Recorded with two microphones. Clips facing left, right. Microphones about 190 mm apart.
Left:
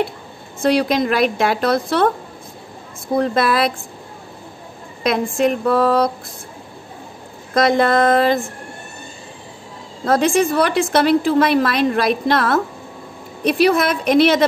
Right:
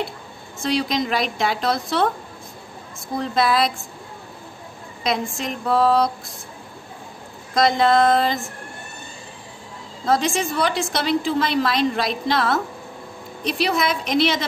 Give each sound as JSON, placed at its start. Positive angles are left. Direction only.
{"t": 0.6, "sound": "a woman's voice", "side_deg": 60}
{"t": 3.2, "sound": "a woman's voice", "side_deg": 60}
{"t": 5.0, "sound": "a woman's voice", "side_deg": 55}
{"t": 7.5, "sound": "a woman's voice", "side_deg": 60}
{"t": 10.0, "sound": "a woman's voice", "side_deg": 55}